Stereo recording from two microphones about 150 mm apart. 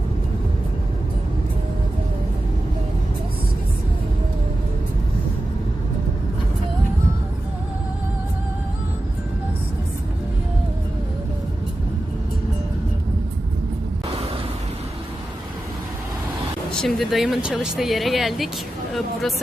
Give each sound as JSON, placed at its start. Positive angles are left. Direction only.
{"t": 16.7, "sound": "speech", "side_deg": 5}